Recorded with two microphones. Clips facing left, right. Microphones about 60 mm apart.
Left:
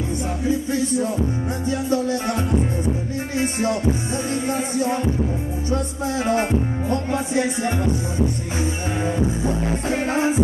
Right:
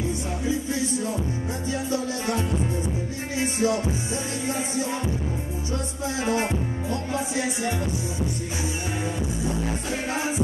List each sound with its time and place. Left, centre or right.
1.7 s music: left
3.3 s music: left
6.2 s music: left
9.8 s music: left